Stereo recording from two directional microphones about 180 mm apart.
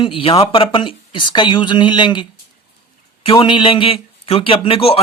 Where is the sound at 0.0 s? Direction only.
30° left (ahead or behind).